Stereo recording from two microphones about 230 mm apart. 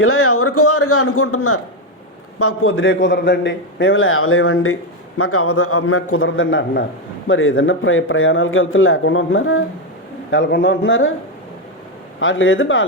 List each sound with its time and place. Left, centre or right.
0.0 s a man's voice: left
12.2 s a man's voice: left